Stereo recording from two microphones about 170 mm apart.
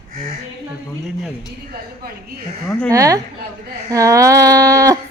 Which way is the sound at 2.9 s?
20° right (ahead or behind).